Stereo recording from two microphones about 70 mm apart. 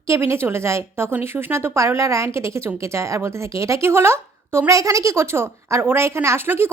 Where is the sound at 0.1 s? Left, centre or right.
Right.